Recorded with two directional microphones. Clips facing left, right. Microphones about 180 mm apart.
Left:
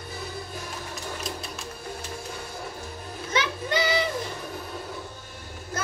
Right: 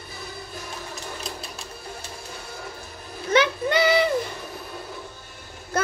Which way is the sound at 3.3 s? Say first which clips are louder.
Right 7 dB; 60° right (ahead or behind).